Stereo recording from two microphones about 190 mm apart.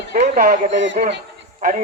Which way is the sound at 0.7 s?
70° right (ahead or behind).